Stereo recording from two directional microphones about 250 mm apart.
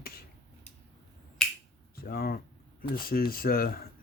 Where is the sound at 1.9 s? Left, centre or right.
Left.